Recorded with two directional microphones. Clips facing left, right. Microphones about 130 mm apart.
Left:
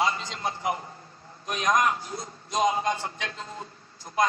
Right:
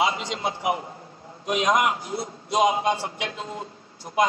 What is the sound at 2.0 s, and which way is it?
Speech, 85° right.